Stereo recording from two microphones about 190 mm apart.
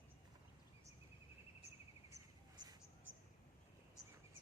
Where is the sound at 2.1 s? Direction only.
20° right (ahead or behind).